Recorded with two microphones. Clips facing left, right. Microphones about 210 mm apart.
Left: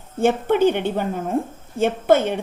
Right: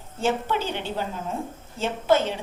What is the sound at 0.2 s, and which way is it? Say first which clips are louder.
A woman's voice: left 8 dB; 55° left (ahead or behind).